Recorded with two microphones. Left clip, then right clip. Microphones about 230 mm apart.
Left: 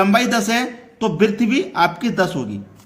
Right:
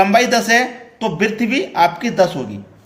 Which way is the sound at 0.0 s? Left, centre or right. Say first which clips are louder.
Right 4 dB; left.